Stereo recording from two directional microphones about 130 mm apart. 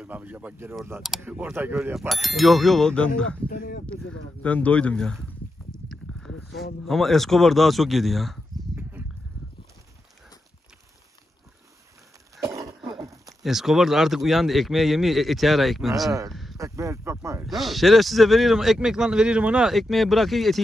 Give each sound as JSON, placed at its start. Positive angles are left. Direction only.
{"t": 0.0, "sound": "speech", "side_deg": -10}
{"t": 2.0, "sound": "speech", "side_deg": 0}
{"t": 12.4, "sound": "cough", "side_deg": -25}
{"t": 13.0, "sound": "a sound", "side_deg": -25}
{"t": 13.4, "sound": "speech", "side_deg": 0}
{"t": 16.3, "sound": "a sound", "side_deg": 0}
{"t": 16.5, "sound": "speech", "side_deg": -25}
{"t": 17.5, "sound": "speech", "side_deg": 0}